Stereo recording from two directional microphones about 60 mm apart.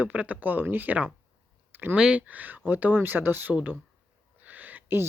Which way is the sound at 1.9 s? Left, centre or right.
Centre.